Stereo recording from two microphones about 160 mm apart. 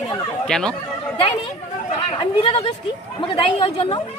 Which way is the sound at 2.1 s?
35° left (ahead or behind).